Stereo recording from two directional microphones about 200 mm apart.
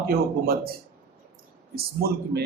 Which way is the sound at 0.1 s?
50° right (ahead or behind).